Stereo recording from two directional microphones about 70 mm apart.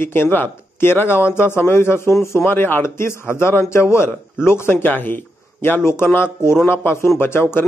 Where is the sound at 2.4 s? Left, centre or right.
Left.